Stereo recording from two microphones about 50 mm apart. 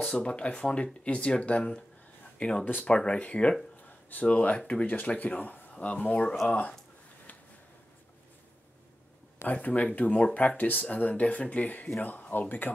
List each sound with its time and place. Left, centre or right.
0.0 s speech: centre
9.5 s speech: left